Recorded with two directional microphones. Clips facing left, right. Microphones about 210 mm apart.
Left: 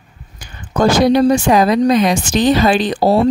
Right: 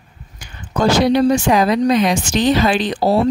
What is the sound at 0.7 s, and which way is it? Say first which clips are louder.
Speech: left 2 dB; 50° left (ahead or behind).